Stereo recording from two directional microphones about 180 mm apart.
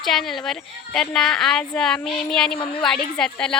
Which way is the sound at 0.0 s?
Centre (ahead or behind).